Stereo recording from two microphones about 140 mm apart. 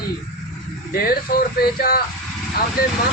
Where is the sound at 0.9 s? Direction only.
90° left.